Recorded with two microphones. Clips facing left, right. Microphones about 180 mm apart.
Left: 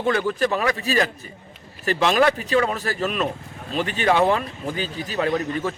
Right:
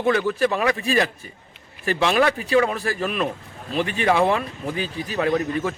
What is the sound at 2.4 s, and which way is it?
A man's voice, 10° right (ahead or behind).